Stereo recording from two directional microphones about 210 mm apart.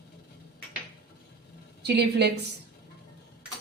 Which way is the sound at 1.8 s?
50° right (ahead or behind).